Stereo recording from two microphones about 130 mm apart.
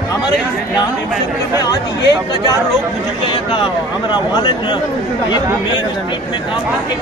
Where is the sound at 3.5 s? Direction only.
40° left (ahead or behind).